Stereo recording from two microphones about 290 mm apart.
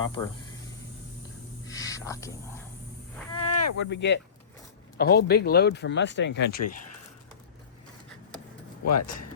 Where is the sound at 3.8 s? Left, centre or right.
Left.